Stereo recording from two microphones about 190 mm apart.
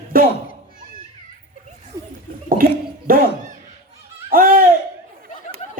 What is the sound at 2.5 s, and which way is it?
Speech, 50° right (ahead or behind).